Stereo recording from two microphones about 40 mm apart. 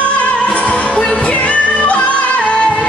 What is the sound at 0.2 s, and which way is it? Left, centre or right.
Music, left.